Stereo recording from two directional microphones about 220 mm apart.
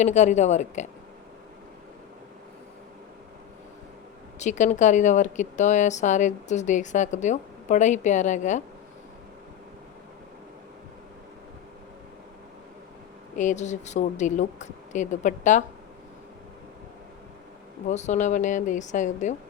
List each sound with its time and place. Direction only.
0.0 s a woman's voice: 30° left (ahead or behind)
4.4 s a woman's voice: 35° left (ahead or behind)
13.3 s a woman's voice: 35° left (ahead or behind)
17.8 s a woman's voice: 30° left (ahead or behind)